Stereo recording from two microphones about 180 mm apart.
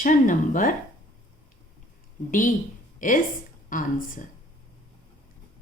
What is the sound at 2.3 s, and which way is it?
Speech, 45° left (ahead or behind).